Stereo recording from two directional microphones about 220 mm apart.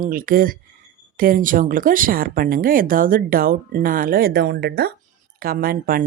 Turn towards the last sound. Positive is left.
turn(degrees=-40)  # may be behind; listen again after turning